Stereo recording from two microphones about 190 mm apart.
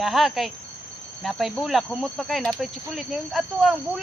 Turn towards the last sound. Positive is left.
turn(degrees=0)  # may be behind; listen again after turning